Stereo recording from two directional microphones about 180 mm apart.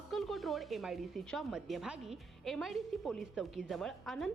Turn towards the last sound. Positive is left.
turn(degrees=0)  # may be behind; listen again after turning